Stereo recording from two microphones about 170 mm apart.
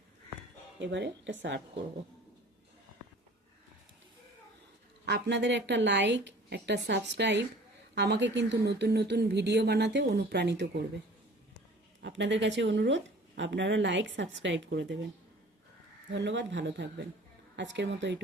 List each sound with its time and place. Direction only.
0.8 s speech: 90° right
5.0 s a woman's voice: 90° right
11.9 s speech: 90° right
16.1 s speech: 90° right